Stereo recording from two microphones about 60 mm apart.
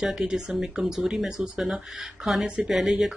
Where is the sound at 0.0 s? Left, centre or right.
Centre.